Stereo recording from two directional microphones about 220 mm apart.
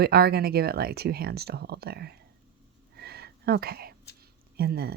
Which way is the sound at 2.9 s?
45° right (ahead or behind).